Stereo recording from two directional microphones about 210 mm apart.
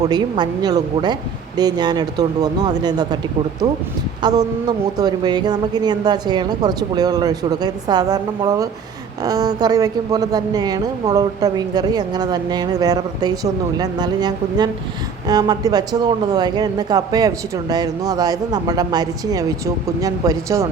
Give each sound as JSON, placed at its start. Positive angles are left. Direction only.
{"t": 0.0, "sound": "a woman's voice", "side_deg": -20}
{"t": 4.2, "sound": "a woman's voice", "side_deg": -20}